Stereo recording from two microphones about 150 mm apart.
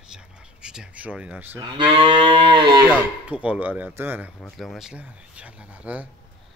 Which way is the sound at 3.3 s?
10° right (ahead or behind).